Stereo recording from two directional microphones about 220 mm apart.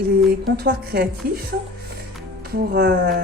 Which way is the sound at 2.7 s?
45° right (ahead or behind).